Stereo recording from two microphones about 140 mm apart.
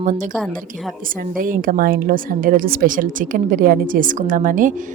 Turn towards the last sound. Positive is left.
turn(degrees=-70)  # may be behind; listen again after turning